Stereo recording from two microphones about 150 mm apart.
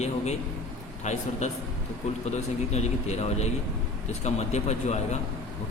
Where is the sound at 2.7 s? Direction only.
45° left (ahead or behind).